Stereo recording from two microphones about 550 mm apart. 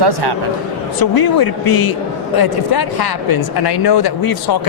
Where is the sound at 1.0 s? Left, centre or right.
Left.